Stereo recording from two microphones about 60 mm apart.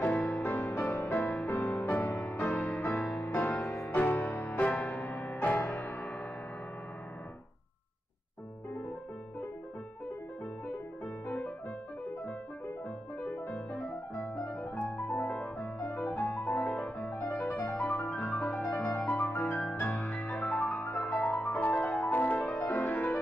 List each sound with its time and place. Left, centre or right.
0.0 s music: left
11.2 s music: centre
13.3 s music: left
18.1 s music: centre